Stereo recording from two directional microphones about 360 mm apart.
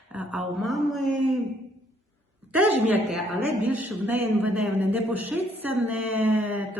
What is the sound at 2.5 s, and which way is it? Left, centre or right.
A woman's voice, centre.